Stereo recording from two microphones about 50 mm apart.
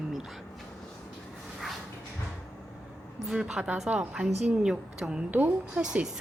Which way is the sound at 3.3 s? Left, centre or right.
Centre.